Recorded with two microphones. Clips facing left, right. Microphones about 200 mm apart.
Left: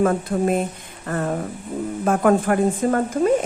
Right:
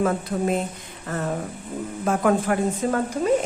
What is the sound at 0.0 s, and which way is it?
A woman's voice, 50° left (ahead or behind).